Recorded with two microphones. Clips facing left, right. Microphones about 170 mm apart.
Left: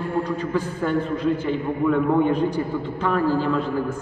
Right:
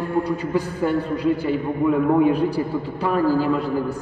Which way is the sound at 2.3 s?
35° right (ahead or behind).